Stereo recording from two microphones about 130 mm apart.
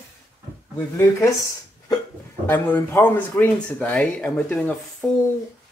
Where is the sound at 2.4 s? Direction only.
15° left (ahead or behind).